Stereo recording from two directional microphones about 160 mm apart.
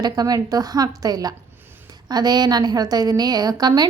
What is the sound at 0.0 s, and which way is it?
A woman's voice, 25° right (ahead or behind).